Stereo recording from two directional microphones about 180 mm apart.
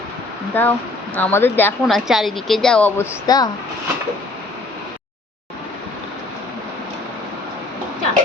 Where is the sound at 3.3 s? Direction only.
20° left (ahead or behind).